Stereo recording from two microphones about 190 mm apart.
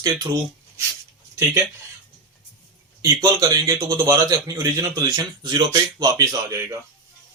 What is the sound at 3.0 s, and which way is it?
A man's voice, 15° right (ahead or behind).